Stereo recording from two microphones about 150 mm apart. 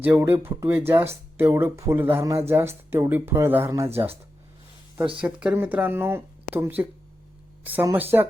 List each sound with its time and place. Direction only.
0.0 s speech: 15° right (ahead or behind)
5.2 s speech: 10° right (ahead or behind)